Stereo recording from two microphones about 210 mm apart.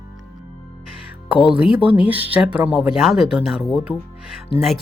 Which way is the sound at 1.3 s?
5° right (ahead or behind).